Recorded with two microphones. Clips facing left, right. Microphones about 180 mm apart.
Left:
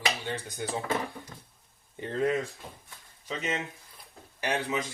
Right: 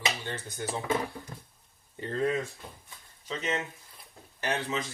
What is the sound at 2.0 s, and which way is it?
Speech, 20° left (ahead or behind).